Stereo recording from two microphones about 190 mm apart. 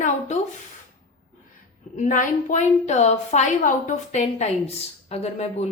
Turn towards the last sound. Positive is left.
turn(degrees=35)  # may be behind; listen again after turning